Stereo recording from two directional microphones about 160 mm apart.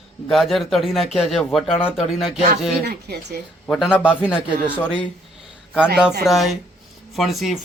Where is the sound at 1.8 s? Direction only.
35° left (ahead or behind).